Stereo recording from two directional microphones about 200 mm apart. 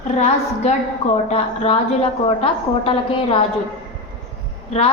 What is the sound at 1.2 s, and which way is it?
A woman's voice, 30° left (ahead or behind).